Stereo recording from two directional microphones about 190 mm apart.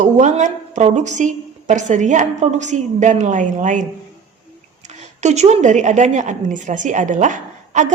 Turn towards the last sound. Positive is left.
turn(degrees=-40)  # may be behind; listen again after turning